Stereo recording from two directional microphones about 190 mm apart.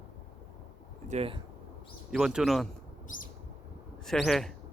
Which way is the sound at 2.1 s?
Centre (ahead or behind).